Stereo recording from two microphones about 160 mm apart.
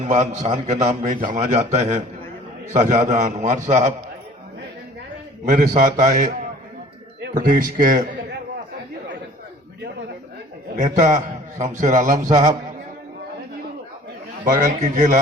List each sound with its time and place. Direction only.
0.0 s a man's voice: 50° right (ahead or behind)
5.5 s a man's voice: 55° right (ahead or behind)
7.2 s a sound: 60° right (ahead or behind)
10.9 s a man's voice: 50° right (ahead or behind)
14.4 s a man's voice: 55° right (ahead or behind)